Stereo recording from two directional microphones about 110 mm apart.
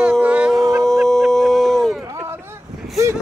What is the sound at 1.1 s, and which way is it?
Dog, 5° left (ahead or behind).